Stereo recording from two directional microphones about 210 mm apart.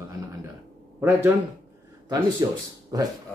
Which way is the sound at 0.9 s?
10° right (ahead or behind).